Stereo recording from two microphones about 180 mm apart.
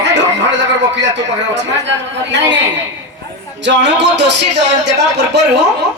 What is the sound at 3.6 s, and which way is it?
Speech, 75° right (ahead or behind).